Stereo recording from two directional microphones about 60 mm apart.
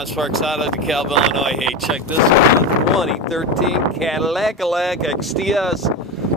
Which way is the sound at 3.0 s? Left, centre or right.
Centre.